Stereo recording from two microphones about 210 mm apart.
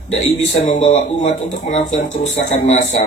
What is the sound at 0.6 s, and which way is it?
A man's voice, 35° left (ahead or behind).